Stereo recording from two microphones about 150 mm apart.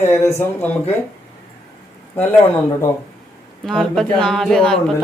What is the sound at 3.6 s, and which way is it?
Speech, centre (ahead or behind).